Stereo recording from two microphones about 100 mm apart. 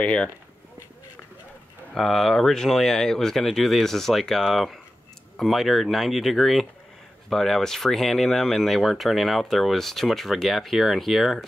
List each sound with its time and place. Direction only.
0.0 s speech: 10° left (ahead or behind)
2.0 s speech: 5° left (ahead or behind)